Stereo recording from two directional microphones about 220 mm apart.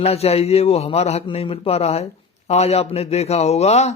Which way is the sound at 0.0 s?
25° left (ahead or behind).